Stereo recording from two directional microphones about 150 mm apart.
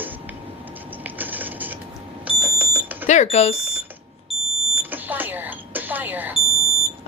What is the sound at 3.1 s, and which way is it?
Speech, 50° left (ahead or behind).